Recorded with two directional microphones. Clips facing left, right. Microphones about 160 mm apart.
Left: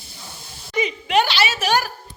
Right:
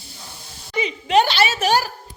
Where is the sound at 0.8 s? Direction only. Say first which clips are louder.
Right 2 dB; 30° right (ahead or behind).